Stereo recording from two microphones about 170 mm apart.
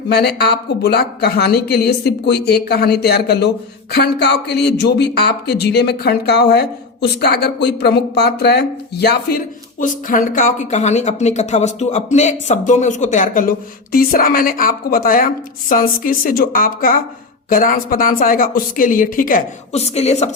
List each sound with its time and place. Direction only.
0.1 s speech: 70° left (ahead or behind)
9.8 s a woman's voice: 50° left (ahead or behind)
19.7 s a woman's voice: 40° left (ahead or behind)